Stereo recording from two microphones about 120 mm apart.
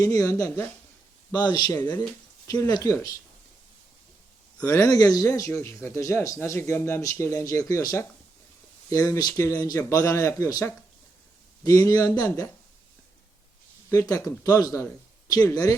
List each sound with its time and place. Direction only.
0.0 s a man's voice: 30° left (ahead or behind)
4.8 s a man's voice: 30° left (ahead or behind)
13.9 s a man's voice: 30° left (ahead or behind)